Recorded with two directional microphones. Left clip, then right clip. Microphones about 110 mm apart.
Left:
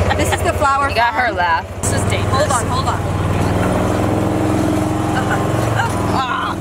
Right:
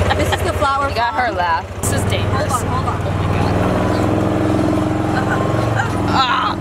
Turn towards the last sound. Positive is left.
turn(degrees=-25)  # may be behind; listen again after turning